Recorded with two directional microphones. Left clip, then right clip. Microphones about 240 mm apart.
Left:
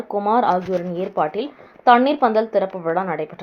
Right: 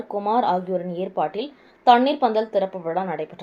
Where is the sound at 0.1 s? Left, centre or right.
Left.